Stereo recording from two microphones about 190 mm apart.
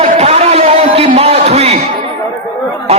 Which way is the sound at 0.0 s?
35° right (ahead or behind).